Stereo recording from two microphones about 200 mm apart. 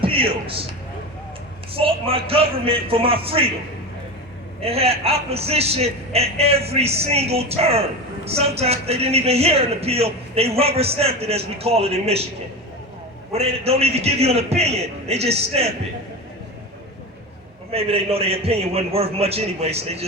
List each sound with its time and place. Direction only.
0.0 s a man's voice: 25° right (ahead or behind)
1.7 s a man's voice: 30° right (ahead or behind)
4.6 s a man's voice: 30° right (ahead or behind)
13.3 s a man's voice: 30° right (ahead or behind)
17.7 s a man's voice: 30° right (ahead or behind)